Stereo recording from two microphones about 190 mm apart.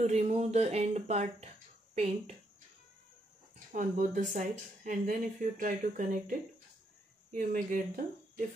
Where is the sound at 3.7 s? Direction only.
45° right (ahead or behind).